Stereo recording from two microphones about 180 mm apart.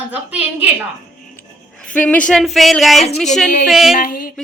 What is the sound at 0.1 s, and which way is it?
Speech, 10° right (ahead or behind).